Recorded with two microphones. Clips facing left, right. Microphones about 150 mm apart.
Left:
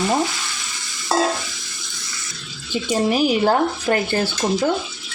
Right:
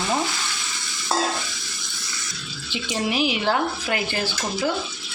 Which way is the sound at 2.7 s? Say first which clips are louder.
Left 6 dB; 45° left (ahead or behind).